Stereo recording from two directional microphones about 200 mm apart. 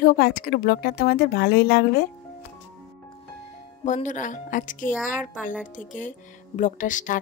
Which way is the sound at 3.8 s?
35° left (ahead or behind).